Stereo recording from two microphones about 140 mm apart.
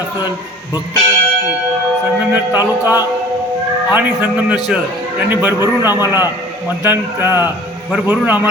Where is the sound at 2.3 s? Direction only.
15° right (ahead or behind).